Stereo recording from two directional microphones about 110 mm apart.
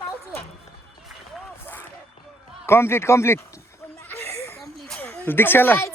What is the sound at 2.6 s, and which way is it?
Speech, 20° left (ahead or behind).